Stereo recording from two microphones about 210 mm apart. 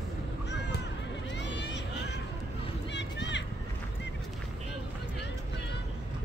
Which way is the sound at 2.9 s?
55° left (ahead or behind).